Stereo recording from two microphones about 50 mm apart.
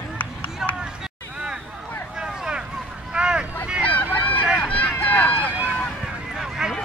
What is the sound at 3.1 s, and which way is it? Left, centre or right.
Vehicle, centre.